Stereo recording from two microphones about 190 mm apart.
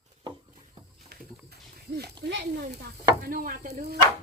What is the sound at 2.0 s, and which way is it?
Speech, 55° right (ahead or behind).